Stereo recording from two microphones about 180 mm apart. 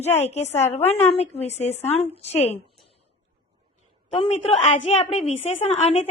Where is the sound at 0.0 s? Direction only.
35° left (ahead or behind).